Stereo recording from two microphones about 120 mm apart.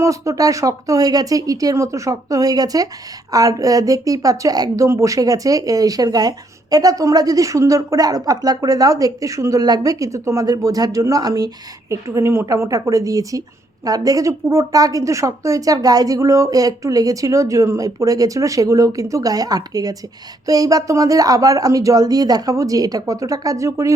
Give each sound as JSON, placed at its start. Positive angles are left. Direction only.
{"t": 0.0, "sound": "a woman's voice", "side_deg": -25}